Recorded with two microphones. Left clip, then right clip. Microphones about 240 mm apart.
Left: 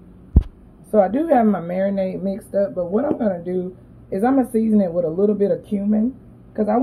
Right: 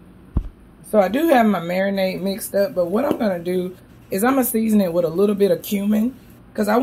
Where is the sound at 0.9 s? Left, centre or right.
Centre.